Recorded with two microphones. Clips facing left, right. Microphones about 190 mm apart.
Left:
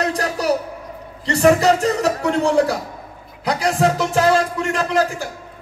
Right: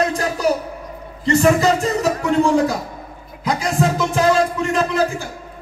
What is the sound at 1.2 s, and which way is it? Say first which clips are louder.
A man's voice: even; 70° left (ahead or behind).